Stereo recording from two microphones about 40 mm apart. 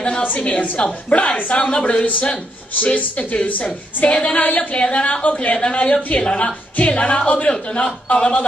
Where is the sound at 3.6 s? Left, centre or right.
Left.